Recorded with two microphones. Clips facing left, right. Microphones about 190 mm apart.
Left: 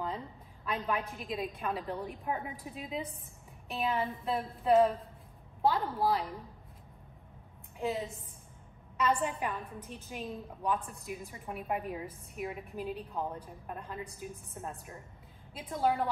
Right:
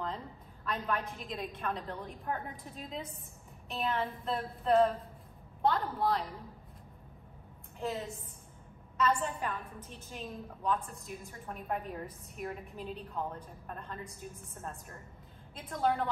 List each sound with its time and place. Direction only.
0.7 s a woman's voice: 5° left (ahead or behind)
8.9 s a woman's voice: 15° left (ahead or behind)